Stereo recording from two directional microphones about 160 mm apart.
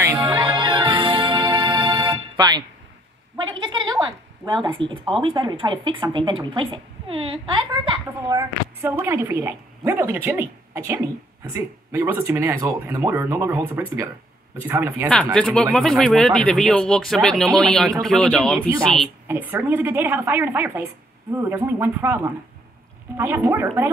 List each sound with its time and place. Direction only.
0.2 s music: 30° right (ahead or behind)
3.3 s a sound: 30° right (ahead or behind)
5.2 s a woman's voice: 30° right (ahead or behind)
8.4 s speech: 15° right (ahead or behind)
15.3 s speech: 5° left (ahead or behind)
19.2 s speech: 15° right (ahead or behind)